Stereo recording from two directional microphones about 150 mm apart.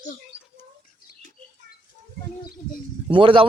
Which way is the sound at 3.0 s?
35° right (ahead or behind).